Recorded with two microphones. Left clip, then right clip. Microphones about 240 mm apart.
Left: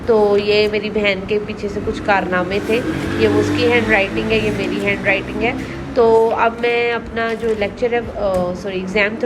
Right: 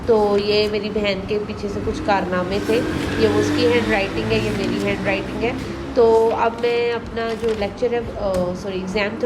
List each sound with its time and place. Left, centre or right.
0.1 s speech: centre